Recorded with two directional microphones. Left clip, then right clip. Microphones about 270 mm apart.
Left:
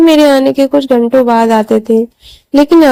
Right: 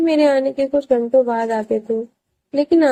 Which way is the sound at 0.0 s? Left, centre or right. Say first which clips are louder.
Left 9 dB; left.